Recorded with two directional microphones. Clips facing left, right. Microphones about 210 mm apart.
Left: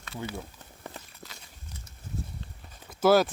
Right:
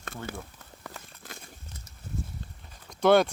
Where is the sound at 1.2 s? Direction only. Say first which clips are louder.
Right 2 dB; 50° right (ahead or behind).